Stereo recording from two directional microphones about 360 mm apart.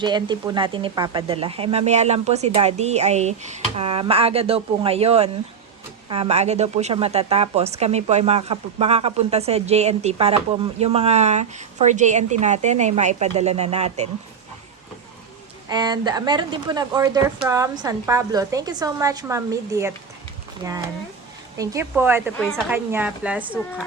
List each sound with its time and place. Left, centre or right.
0.0 s speech: centre
15.7 s speech: centre